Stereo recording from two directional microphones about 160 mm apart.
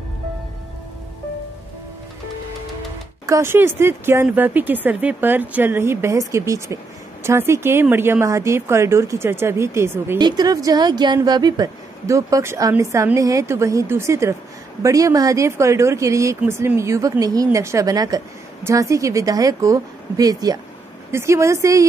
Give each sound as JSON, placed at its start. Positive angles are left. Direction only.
{"t": 3.3, "sound": "speech", "side_deg": -15}